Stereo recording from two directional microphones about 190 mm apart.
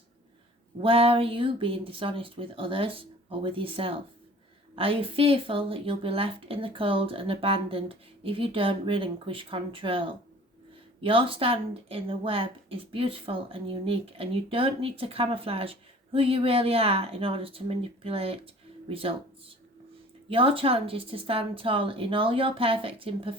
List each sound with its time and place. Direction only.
0.8 s a woman's voice: 30° right (ahead or behind)
11.0 s a woman's voice: 25° right (ahead or behind)
20.3 s a woman's voice: 30° right (ahead or behind)